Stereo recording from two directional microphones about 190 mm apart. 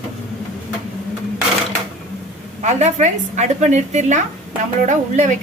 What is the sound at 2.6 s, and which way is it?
A woman's voice, 40° right (ahead or behind).